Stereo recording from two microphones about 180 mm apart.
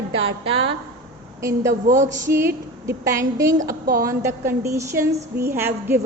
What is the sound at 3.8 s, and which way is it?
Speech, 55° right (ahead or behind).